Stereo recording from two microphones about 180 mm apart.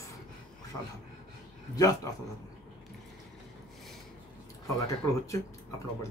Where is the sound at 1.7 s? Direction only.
20° left (ahead or behind).